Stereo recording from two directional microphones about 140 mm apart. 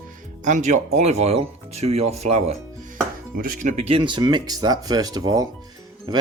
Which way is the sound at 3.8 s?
40° right (ahead or behind).